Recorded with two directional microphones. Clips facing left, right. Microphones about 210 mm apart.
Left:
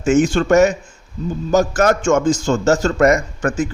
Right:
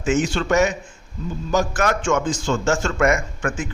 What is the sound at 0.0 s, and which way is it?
A man's voice, 50° left (ahead or behind).